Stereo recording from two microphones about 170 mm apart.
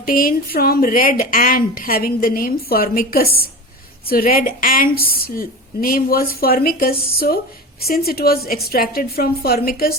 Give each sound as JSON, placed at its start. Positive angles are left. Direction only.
{"t": 0.0, "sound": "a woman's voice", "side_deg": 55}